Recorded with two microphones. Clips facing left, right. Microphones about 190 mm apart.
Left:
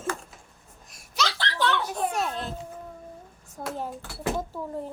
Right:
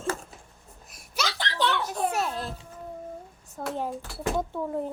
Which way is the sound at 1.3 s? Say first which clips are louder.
Right 1 dB; 15° right (ahead or behind).